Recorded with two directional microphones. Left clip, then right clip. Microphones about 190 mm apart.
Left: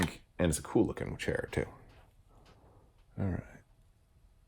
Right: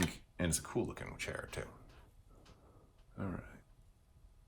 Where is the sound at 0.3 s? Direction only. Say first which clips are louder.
Left 8 dB; 50° left (ahead or behind).